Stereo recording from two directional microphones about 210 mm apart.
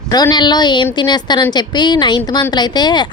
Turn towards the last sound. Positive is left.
turn(degrees=20)  # may be behind; listen again after turning